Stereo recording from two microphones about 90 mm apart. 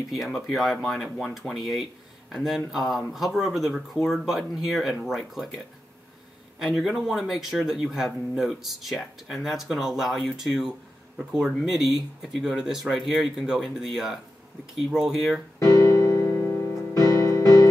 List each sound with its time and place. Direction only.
0.1 s speech: centre (ahead or behind)
6.6 s speech: 5° right (ahead or behind)
15.6 s music: 35° left (ahead or behind)